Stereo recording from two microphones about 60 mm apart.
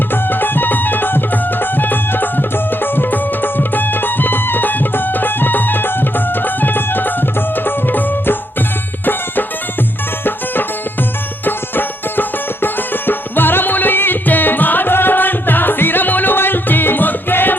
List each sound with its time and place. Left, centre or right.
0.1 s music: left